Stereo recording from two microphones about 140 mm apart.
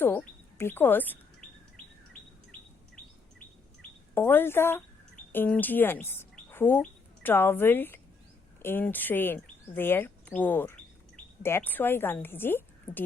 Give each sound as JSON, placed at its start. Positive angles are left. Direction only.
{"t": 0.0, "sound": "bird", "side_deg": 15}
{"t": 4.1, "sound": "speech", "side_deg": 15}